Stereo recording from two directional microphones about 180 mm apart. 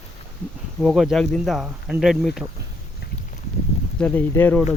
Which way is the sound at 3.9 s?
10° left (ahead or behind).